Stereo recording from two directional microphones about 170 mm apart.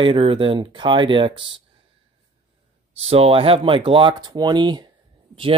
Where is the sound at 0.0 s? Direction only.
30° right (ahead or behind).